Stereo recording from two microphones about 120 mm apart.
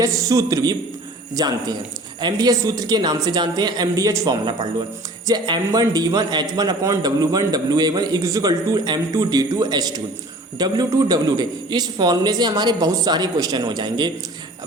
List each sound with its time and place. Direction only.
0.0 s a man's voice: 25° right (ahead or behind)